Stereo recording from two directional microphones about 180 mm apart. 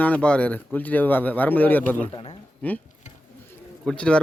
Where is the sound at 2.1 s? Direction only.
30° left (ahead or behind).